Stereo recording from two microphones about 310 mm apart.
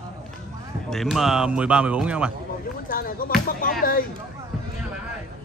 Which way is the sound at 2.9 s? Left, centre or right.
Left.